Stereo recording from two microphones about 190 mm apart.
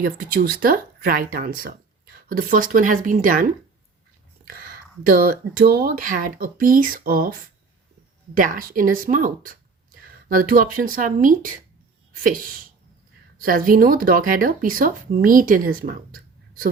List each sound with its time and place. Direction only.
0.0 s speech: 50° right (ahead or behind)
4.4 s speech: 50° right (ahead or behind)
8.4 s speech: 45° right (ahead or behind)